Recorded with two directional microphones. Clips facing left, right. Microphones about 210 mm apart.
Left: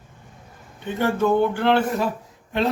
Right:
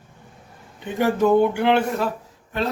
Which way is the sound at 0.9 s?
15° right (ahead or behind).